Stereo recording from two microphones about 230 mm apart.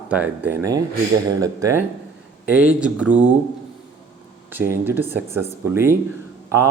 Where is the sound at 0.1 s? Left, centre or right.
Centre.